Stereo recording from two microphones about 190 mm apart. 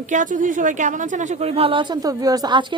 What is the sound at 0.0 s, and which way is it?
A woman's voice, 40° right (ahead or behind).